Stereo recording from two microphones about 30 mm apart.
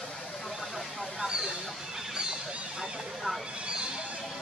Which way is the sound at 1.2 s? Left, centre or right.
Right.